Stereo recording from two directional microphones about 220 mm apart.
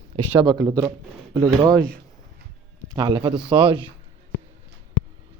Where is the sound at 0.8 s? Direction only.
10° right (ahead or behind).